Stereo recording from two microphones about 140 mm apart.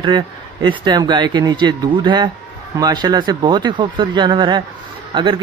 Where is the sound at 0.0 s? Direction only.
35° right (ahead or behind).